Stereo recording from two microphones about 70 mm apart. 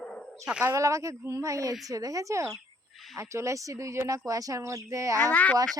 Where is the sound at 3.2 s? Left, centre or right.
Right.